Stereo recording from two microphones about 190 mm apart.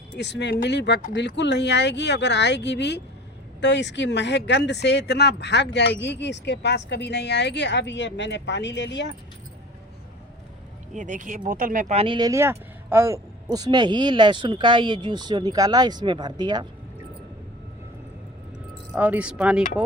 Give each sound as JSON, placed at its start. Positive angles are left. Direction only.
{"t": 0.2, "sound": "speech", "side_deg": 65}
{"t": 10.9, "sound": "speech", "side_deg": -40}
{"t": 18.9, "sound": "speech", "side_deg": -10}